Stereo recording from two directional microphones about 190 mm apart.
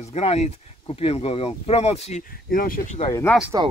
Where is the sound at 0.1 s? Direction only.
35° left (ahead or behind).